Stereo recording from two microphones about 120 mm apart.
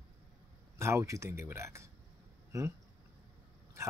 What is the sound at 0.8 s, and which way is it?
Speech, 25° right (ahead or behind).